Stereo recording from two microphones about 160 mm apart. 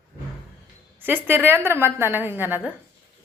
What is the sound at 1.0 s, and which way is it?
A woman's voice, 15° right (ahead or behind).